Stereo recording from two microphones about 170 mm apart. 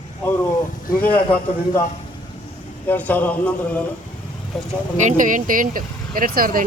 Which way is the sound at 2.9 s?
10° left (ahead or behind).